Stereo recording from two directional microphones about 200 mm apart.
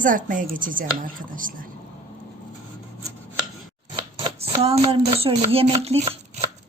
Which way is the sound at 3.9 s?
25° right (ahead or behind).